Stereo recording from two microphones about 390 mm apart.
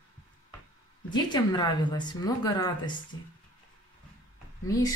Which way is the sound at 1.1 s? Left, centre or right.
Centre.